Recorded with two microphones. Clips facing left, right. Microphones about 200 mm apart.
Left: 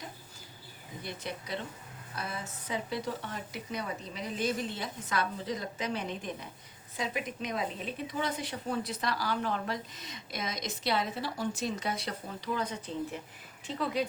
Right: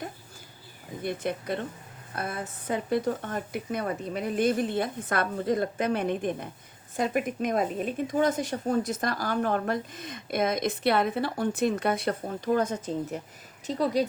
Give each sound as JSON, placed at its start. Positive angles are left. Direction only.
{"t": 1.0, "sound": "a woman's voice", "side_deg": -50}